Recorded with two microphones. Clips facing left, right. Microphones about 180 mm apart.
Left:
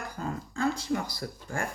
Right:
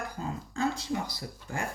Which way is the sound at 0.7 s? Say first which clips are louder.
Left 2 dB; 20° right (ahead or behind).